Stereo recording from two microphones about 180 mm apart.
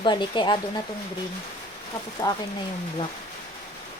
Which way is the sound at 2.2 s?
20° left (ahead or behind).